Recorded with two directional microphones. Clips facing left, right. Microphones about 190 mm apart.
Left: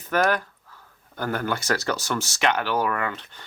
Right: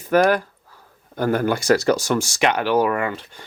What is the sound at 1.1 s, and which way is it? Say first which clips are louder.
Speech: right 7 dB; 15° right (ahead or behind).